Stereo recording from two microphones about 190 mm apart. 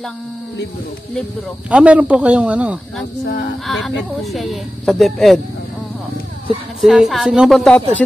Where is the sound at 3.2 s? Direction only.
70° left (ahead or behind).